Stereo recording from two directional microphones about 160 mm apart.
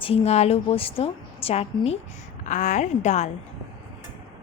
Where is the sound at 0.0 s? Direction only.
40° left (ahead or behind).